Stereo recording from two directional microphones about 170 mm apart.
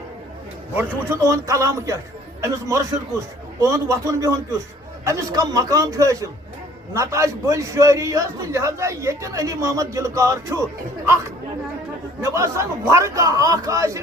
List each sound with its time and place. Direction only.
0.8 s a man's voice: 15° right (ahead or behind)
12.2 s a man's voice: 15° right (ahead or behind)